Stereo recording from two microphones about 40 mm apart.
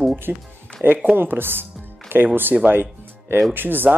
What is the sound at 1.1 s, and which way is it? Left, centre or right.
Speech, right.